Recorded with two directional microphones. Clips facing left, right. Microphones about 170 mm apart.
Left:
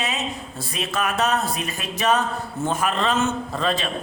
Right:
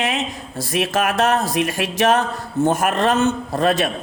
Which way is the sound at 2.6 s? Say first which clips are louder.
Right 5 dB; 70° right (ahead or behind).